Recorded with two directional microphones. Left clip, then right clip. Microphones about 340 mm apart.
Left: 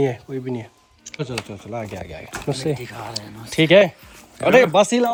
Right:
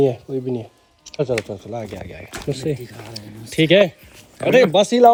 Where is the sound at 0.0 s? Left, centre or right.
Left.